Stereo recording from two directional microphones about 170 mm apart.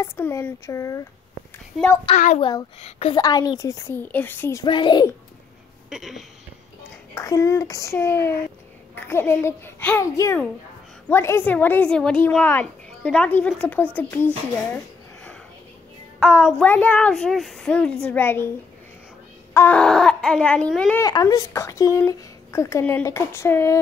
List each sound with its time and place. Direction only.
0.0 s speech: 15° left (ahead or behind)
1.8 s a woman's voice: centre (ahead or behind)
2.1 s a child's voice: 45° left (ahead or behind)
2.8 s a woman's voice: 35° left (ahead or behind)
3.2 s speech: 20° left (ahead or behind)
4.6 s a child's voice: 25° left (ahead or behind)
5.9 s a sound: centre (ahead or behind)
7.2 s speech: 20° left (ahead or behind)
16.2 s a woman's voice: 10° left (ahead or behind)
19.5 s a woman's voice: 10° left (ahead or behind)
21.0 s speech: 20° left (ahead or behind)